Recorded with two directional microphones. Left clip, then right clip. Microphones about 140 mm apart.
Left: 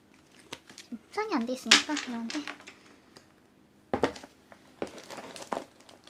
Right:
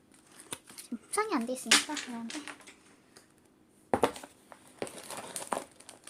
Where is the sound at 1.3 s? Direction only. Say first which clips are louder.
Left 1 dB; 10° right (ahead or behind).